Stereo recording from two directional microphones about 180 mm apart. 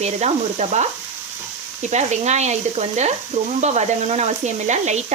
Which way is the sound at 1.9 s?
40° right (ahead or behind).